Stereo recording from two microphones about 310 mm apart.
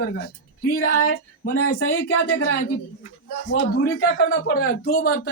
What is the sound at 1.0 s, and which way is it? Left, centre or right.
Speech, left.